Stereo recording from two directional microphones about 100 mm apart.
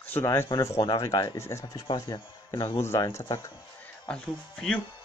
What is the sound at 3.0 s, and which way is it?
Speech, 30° left (ahead or behind).